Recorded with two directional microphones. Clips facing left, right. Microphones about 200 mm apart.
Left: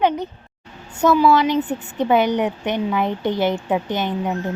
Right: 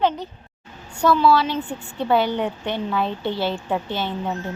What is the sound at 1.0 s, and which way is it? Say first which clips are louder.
A woman's voice: left 2 dB; 15° left (ahead or behind).